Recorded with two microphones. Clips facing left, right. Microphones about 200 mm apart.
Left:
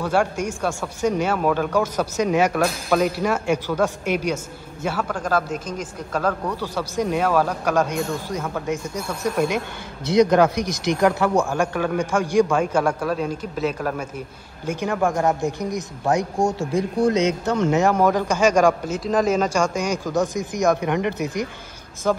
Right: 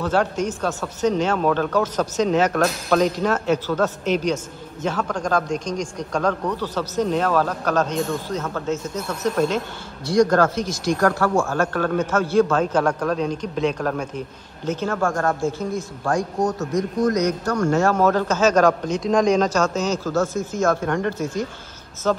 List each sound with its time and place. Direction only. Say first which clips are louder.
0.0 s speech: even; 10° left (ahead or behind)